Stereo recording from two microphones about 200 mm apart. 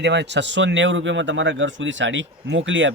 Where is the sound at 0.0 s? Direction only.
60° right (ahead or behind).